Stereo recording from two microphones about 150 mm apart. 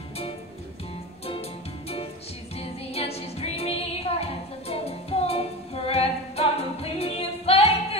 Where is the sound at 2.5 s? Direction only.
40° left (ahead or behind).